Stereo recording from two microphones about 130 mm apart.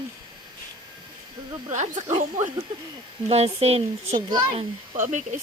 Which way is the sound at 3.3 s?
55° right (ahead or behind).